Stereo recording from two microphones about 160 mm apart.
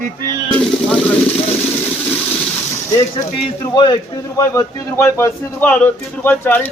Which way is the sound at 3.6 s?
30° left (ahead or behind).